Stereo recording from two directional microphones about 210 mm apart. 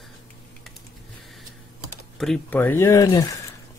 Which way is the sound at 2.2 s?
5° left (ahead or behind).